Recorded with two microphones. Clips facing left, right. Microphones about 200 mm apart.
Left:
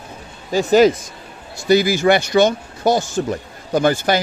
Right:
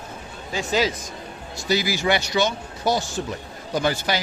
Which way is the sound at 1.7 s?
50° left (ahead or behind).